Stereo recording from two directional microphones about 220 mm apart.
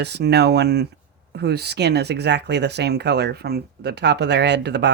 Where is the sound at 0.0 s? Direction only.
50° right (ahead or behind).